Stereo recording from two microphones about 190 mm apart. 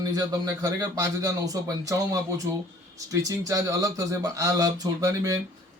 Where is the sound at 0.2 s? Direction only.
20° right (ahead or behind).